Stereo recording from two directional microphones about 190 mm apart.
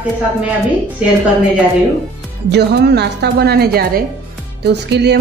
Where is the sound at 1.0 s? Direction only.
5° right (ahead or behind).